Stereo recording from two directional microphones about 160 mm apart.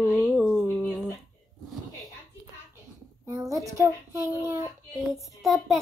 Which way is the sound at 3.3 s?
20° right (ahead or behind).